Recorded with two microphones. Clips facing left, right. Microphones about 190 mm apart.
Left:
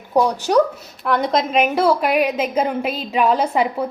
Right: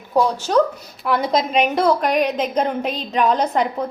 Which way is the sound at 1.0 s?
Centre (ahead or behind).